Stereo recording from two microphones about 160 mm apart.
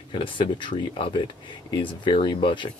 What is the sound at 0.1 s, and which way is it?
Speech, 30° left (ahead or behind).